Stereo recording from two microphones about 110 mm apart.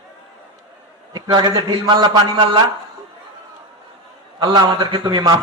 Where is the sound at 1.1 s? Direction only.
40° right (ahead or behind).